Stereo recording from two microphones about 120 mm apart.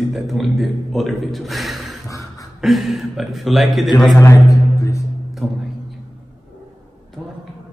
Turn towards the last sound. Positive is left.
turn(degrees=0)  # may be behind; listen again after turning